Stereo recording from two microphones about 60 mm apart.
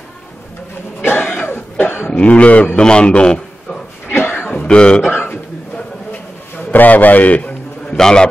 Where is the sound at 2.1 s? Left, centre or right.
Left.